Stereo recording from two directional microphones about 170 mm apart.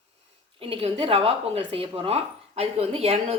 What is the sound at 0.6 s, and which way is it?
Speech, 35° right (ahead or behind).